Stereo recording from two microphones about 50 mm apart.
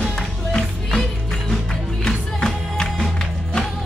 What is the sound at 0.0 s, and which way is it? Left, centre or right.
Music, centre.